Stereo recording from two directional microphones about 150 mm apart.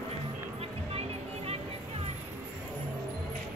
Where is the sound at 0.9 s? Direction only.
40° right (ahead or behind).